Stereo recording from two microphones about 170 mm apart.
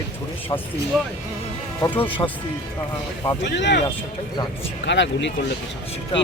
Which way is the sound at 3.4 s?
90° left.